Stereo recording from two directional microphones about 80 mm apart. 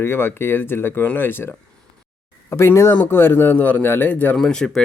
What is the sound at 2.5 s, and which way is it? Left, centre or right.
A man's voice, left.